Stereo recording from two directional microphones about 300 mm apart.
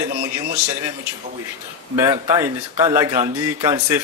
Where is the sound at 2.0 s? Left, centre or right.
Centre.